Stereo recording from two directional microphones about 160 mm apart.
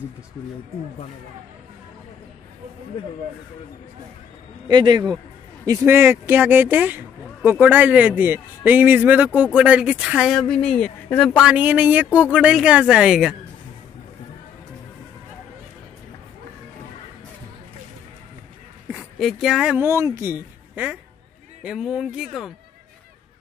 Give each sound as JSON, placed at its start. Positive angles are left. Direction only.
{"t": 4.6, "sound": "speech", "side_deg": -30}
{"t": 19.1, "sound": "a woman's voice", "side_deg": 0}